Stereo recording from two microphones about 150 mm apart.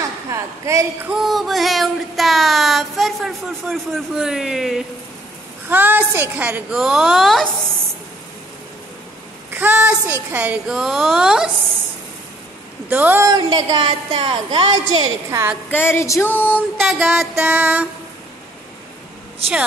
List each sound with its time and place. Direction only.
0.3 s a woman's voice: 20° right (ahead or behind)
1.1 s child singing: centre (ahead or behind)
5.7 s a woman's voice: 10° right (ahead or behind)
9.5 s a woman's voice: 10° right (ahead or behind)
12.9 s a woman's voice: 10° right (ahead or behind)
13.3 s a woman's voice: 30° right (ahead or behind)
15.7 s a sound: 15° left (ahead or behind)
16.4 s a woman's voice: 10° right (ahead or behind)